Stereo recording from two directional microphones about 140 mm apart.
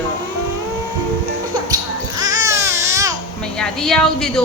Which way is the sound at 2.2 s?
25° right (ahead or behind).